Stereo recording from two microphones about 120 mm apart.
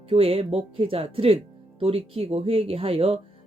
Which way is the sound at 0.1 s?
55° right (ahead or behind).